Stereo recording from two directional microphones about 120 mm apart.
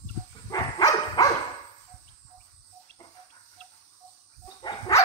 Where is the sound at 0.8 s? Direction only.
30° left (ahead or behind).